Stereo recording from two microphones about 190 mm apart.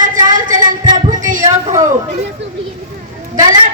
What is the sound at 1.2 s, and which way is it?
Speech, 45° right (ahead or behind).